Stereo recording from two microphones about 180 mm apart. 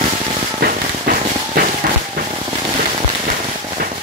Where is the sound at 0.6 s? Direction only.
55° right (ahead or behind).